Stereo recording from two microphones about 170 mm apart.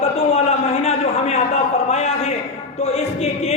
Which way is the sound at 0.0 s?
40° left (ahead or behind).